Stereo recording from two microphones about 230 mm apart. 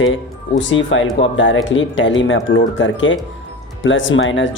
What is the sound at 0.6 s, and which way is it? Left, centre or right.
Speech, left.